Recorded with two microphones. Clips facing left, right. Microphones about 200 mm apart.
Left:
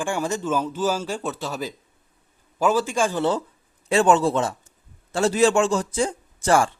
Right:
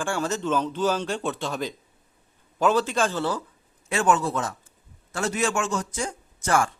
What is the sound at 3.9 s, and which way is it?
A man's voice, 30° left (ahead or behind).